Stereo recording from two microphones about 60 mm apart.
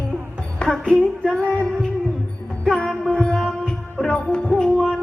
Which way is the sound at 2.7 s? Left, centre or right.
Centre.